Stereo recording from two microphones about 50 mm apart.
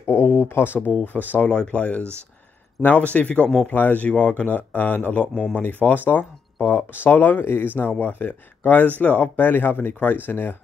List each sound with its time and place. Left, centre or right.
0.0 s speech: left
1.0 s speech: left
1.5 s speech: left